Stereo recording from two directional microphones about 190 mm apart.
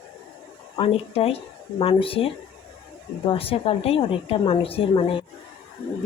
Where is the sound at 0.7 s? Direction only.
30° left (ahead or behind).